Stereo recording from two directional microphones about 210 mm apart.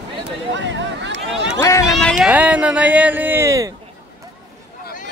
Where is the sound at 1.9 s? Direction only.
Centre (ahead or behind); by 3.7 s 15° right (ahead or behind).